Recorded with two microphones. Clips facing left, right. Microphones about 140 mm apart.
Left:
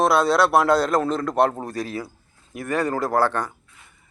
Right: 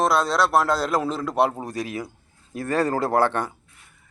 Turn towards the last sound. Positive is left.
turn(degrees=-25)  # may be behind; listen again after turning